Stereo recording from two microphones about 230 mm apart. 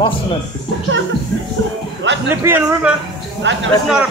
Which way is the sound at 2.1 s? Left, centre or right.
Right.